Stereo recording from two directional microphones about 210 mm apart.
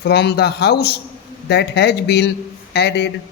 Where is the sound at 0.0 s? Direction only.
50° left (ahead or behind).